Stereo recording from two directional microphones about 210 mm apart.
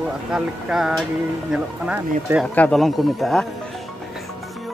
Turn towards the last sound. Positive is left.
turn(degrees=0)  # may be behind; listen again after turning